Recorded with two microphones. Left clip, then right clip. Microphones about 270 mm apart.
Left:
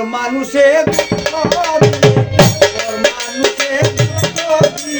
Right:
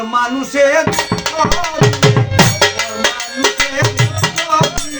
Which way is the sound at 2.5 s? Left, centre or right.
Right.